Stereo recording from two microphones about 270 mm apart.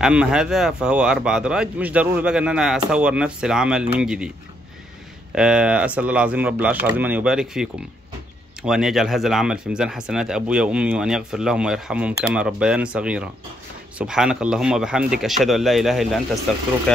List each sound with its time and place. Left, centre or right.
0.0 s speech: centre
5.3 s speech: centre